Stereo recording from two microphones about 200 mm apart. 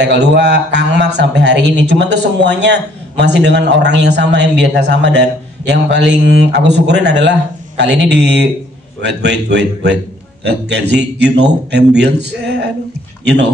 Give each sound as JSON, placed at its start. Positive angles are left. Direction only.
{"t": 0.0, "sound": "a man's voice", "side_deg": -55}